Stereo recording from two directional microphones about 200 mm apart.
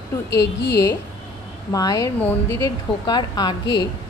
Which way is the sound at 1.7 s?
15° left (ahead or behind).